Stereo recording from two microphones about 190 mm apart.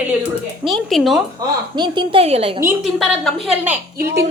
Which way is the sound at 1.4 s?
20° right (ahead or behind).